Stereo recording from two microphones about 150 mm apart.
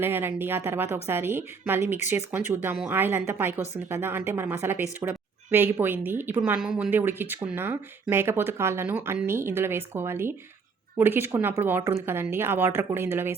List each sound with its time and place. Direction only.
0.0 s speech: 15° right (ahead or behind)